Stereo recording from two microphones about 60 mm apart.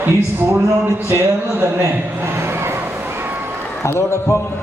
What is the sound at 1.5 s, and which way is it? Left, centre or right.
Speech, right.